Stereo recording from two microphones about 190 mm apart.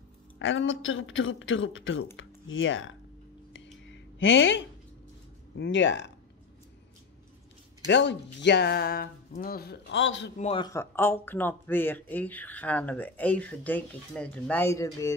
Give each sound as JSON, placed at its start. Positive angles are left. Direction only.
{"t": 0.4, "sound": "a woman's voice", "side_deg": 85}
{"t": 3.5, "sound": "a sound", "side_deg": 80}
{"t": 5.6, "sound": "speech", "side_deg": 70}
{"t": 7.9, "sound": "speech", "side_deg": 65}
{"t": 10.4, "sound": "a man's voice", "side_deg": 30}
{"t": 10.7, "sound": "speech", "side_deg": 15}